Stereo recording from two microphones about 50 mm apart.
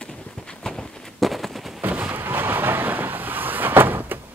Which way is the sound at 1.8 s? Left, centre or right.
Right.